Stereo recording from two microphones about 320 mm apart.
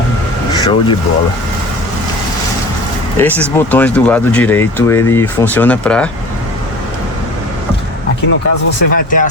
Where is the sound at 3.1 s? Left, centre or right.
Centre.